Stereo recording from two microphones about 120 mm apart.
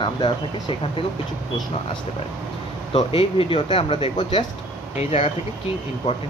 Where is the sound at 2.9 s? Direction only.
50° left (ahead or behind).